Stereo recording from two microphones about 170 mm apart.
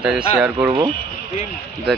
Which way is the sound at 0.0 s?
5° right (ahead or behind).